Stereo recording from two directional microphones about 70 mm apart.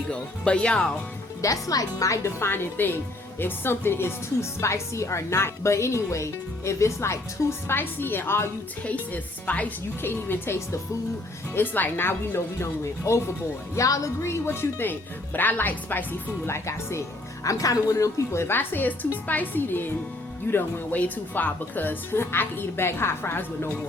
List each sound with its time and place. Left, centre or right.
0.1 s speech: centre
1.4 s speech: left
7.7 s speech: left
8.8 s speech: left
16.5 s speech: left
17.4 s speech: left